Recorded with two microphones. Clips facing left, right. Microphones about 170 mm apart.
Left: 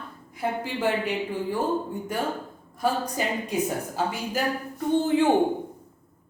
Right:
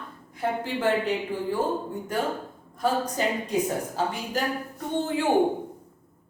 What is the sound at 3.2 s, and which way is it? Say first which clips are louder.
Speech: right 2 dB; 10° left (ahead or behind).